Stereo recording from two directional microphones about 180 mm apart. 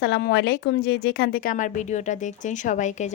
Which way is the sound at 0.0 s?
65° left (ahead or behind).